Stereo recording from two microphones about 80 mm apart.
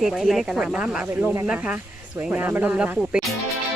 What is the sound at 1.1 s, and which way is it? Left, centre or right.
Speech, right.